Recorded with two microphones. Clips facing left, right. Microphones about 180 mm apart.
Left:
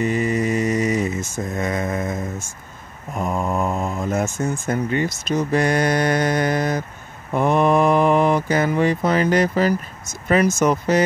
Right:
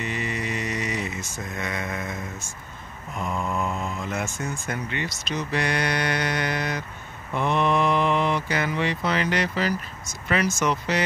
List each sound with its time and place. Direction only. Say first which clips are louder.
0.0 s mantra: left 10 dB; 45° left (ahead or behind)
3.2 s speech: left 5 dB; 45° left (ahead or behind)